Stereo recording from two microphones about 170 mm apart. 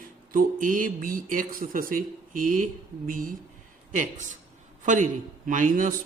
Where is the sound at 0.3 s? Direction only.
50° right (ahead or behind).